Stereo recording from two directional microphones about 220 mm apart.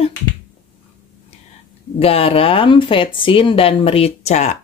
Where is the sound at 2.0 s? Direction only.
25° left (ahead or behind).